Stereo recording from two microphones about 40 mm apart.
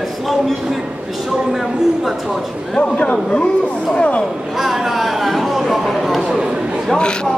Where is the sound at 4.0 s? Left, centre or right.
Left.